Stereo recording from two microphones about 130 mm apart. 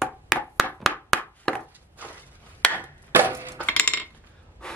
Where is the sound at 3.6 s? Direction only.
10° left (ahead or behind).